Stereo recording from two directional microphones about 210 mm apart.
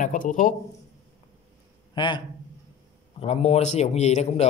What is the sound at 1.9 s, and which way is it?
A man's voice, 20° left (ahead or behind).